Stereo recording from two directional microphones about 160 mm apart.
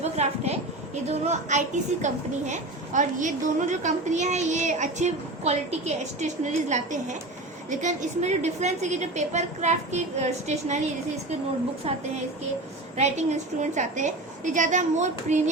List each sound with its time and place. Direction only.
0.0 s a sound: 45° right (ahead or behind)
1.0 s a woman's voice: 45° right (ahead or behind)
11.9 s a woman's voice: 40° right (ahead or behind)